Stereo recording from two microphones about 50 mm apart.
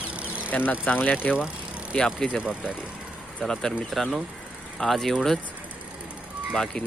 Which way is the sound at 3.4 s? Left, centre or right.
Centre.